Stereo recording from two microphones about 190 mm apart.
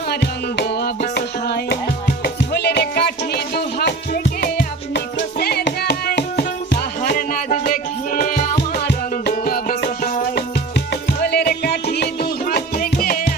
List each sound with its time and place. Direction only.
0.1 s music: 60° left (ahead or behind)